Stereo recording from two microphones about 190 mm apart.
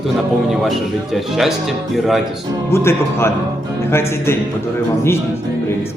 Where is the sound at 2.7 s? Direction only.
15° left (ahead or behind).